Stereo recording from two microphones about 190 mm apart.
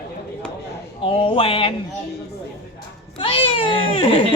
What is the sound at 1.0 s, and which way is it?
Speech, 30° left (ahead or behind).